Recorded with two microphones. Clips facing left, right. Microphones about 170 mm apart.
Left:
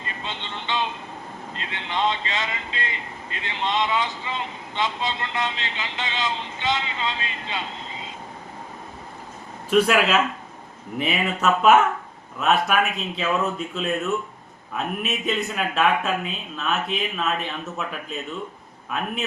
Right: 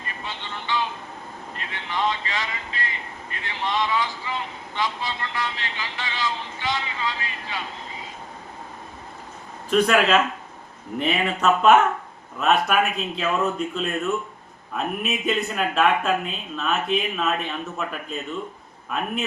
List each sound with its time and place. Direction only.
0.2 s music: 20° left (ahead or behind)
1.5 s speech: 20° left (ahead or behind)
9.6 s speech: 5° left (ahead or behind)